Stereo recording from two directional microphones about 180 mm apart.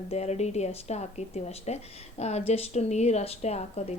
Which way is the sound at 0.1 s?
35° left (ahead or behind).